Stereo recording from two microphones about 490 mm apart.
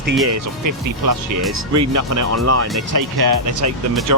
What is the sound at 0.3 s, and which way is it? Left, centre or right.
Speech, right.